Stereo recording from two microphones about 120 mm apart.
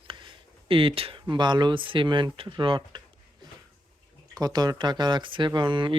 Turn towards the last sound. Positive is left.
turn(degrees=-40)  # may be behind; listen again after turning